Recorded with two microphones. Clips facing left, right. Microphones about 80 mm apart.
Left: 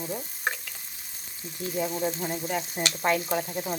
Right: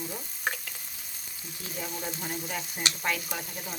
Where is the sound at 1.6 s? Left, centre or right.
Left.